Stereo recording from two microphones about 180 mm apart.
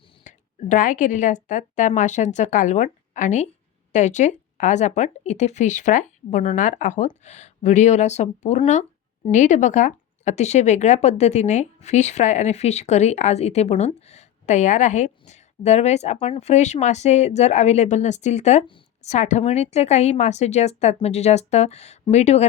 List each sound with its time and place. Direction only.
0.3 s a woman's voice: 45° left (ahead or behind)